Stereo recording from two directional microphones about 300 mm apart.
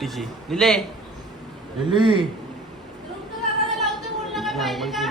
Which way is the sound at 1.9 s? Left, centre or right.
Centre.